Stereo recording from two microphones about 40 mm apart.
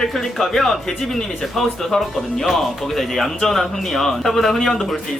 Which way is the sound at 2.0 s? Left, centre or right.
Centre.